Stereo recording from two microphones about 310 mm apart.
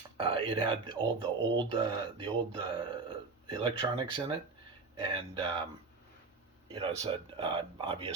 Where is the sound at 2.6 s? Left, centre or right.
Centre.